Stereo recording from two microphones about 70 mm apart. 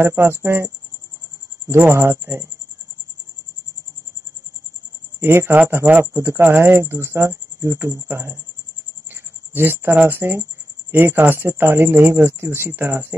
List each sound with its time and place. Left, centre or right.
0.0 s speech: right
5.2 s speech: right
9.1 s a sound: right
9.9 s speech: right